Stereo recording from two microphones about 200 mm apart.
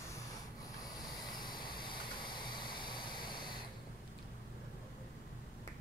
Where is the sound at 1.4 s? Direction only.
20° left (ahead or behind).